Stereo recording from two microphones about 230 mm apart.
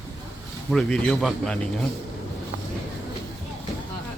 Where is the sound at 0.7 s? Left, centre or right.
Centre.